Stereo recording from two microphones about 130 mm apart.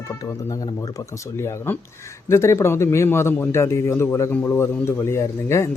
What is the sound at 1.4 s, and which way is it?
Speech, 15° left (ahead or behind).